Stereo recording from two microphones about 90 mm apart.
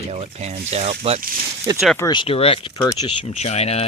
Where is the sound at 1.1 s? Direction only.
90° right.